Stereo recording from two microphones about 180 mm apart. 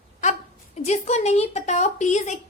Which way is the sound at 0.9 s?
40° left (ahead or behind).